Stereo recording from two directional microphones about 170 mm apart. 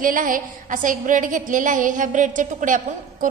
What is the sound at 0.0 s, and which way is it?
A woman's voice, 50° right (ahead or behind).